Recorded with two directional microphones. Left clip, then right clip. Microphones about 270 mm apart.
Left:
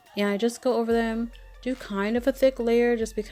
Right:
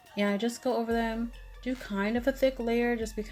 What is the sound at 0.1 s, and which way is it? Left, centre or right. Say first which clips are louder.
Speech: left 4 dB; left.